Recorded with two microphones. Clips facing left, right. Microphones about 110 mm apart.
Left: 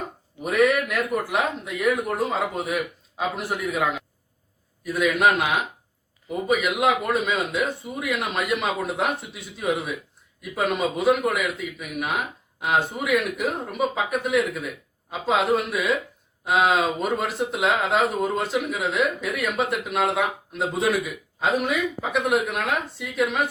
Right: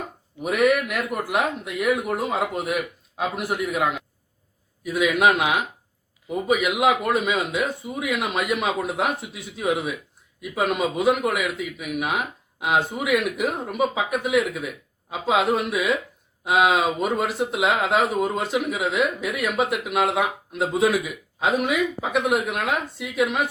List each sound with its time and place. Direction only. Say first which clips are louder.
0.4 s speech: even; 5° right (ahead or behind)